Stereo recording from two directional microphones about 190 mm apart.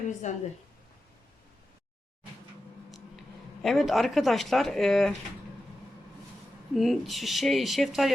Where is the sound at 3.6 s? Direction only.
Centre (ahead or behind).